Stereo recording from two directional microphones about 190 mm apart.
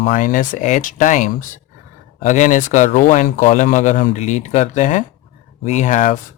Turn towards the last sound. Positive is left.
turn(degrees=40)  # may be behind; listen again after turning